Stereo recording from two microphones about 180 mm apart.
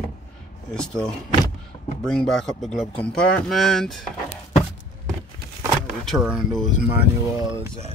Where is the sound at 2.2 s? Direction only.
Centre (ahead or behind).